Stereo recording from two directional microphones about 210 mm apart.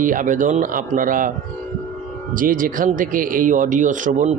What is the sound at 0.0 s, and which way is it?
Speech, 40° right (ahead or behind).